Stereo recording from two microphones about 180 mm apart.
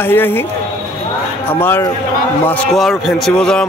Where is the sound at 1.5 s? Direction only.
10° left (ahead or behind).